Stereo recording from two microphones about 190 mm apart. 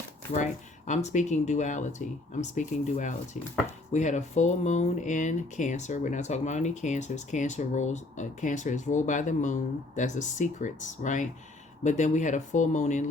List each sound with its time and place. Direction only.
0.3 s speech: 40° left (ahead or behind)